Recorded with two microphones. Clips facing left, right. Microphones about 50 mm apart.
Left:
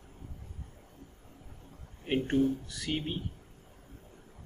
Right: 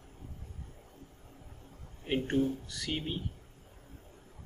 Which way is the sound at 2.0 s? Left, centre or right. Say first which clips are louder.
Left 2 dB; centre.